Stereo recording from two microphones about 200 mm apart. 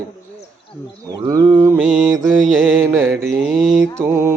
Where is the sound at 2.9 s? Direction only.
10° right (ahead or behind).